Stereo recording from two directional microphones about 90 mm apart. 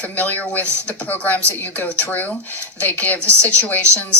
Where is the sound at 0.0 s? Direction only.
20° left (ahead or behind).